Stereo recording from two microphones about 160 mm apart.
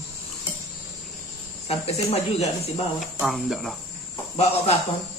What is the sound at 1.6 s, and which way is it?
Speech, 40° left (ahead or behind).